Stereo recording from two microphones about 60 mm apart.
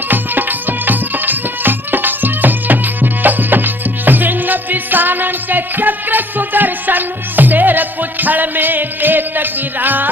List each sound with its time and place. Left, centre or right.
0.9 s music: right